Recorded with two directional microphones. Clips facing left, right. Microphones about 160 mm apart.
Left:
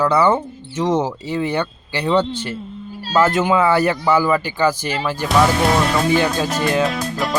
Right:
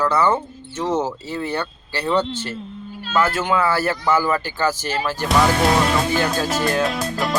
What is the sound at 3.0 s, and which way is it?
Speech, 35° left (ahead or behind).